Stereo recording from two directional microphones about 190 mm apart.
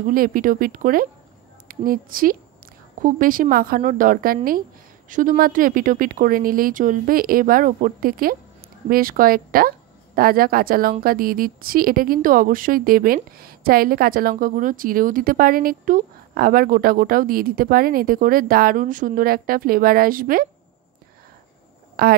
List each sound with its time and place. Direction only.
0.0 s speech: 50° right (ahead or behind)
22.0 s speech: 55° right (ahead or behind)